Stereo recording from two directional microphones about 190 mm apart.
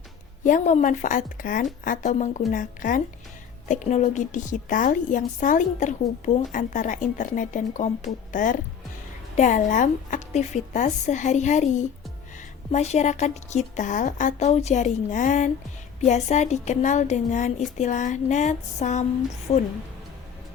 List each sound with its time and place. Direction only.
0.4 s a woman's voice: 40° left (ahead or behind)